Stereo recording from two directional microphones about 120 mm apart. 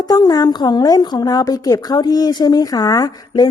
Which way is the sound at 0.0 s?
35° left (ahead or behind).